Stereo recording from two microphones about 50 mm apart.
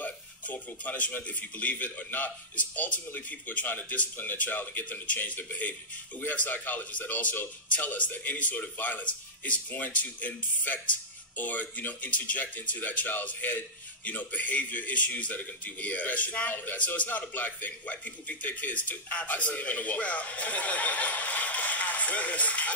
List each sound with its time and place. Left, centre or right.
0.0 s speech: left
16.7 s speech: left